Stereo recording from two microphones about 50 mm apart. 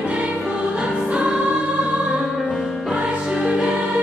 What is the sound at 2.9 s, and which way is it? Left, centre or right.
Music, centre.